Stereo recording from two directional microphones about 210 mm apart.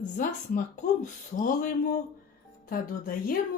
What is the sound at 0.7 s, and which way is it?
A woman's voice, 35° left (ahead or behind).